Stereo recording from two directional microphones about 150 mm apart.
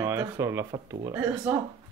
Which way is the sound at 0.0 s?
20° right (ahead or behind).